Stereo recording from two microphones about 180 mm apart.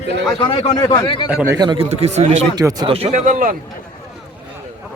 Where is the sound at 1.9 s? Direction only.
35° right (ahead or behind).